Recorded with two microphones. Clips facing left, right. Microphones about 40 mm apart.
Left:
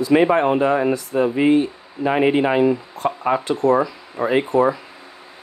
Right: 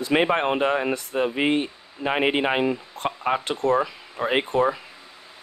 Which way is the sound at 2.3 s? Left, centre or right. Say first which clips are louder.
Left 6 dB; right.